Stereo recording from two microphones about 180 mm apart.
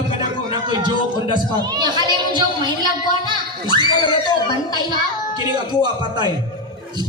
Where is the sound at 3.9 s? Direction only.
25° left (ahead or behind).